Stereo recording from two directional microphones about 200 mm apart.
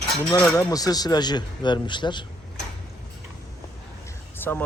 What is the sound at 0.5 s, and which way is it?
Speech, 20° left (ahead or behind).